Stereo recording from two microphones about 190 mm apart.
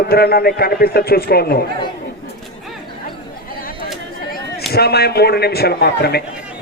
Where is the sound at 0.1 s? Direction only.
55° left (ahead or behind).